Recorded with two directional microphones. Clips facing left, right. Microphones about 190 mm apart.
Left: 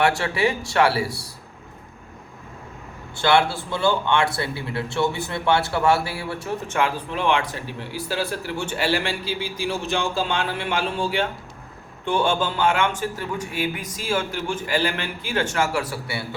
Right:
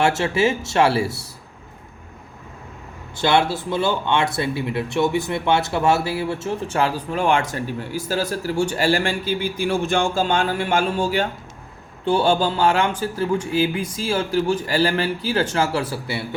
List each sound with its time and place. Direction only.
0.0 s speech: 25° right (ahead or behind)
3.2 s speech: 20° right (ahead or behind)
6.7 s speech: 40° right (ahead or behind)